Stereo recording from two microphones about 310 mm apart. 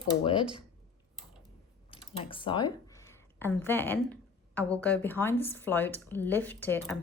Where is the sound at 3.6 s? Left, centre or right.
Centre.